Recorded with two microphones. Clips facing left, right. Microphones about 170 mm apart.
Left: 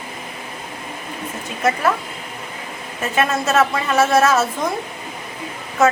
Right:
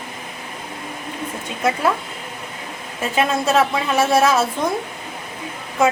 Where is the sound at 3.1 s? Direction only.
15° right (ahead or behind).